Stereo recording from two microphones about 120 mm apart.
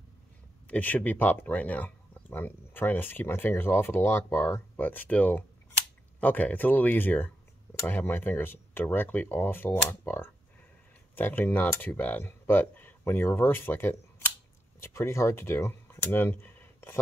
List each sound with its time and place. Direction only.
0.7 s speech: 15° left (ahead or behind)